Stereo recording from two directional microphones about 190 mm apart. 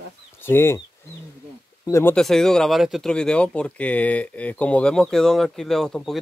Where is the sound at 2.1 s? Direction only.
Centre (ahead or behind).